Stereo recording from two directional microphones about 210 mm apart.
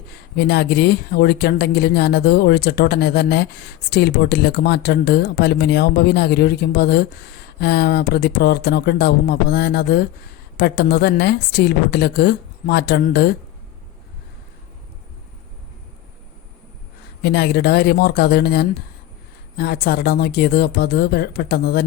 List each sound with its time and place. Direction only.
0.1 s speech: 50° left (ahead or behind)
17.2 s speech: 50° left (ahead or behind)